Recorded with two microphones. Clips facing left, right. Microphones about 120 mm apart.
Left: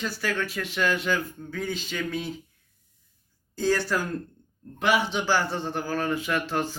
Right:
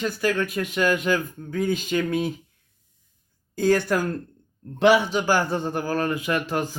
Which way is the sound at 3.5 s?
55° right (ahead or behind).